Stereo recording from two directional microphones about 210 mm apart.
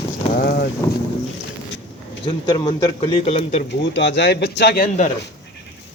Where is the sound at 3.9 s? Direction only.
55° left (ahead or behind).